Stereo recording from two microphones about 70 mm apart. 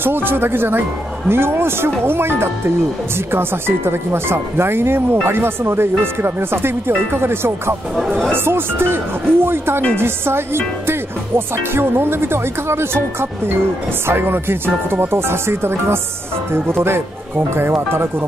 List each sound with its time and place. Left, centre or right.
0.0 s speech: right